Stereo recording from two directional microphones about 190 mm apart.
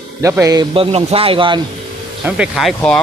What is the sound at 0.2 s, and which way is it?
A man's voice, 15° right (ahead or behind).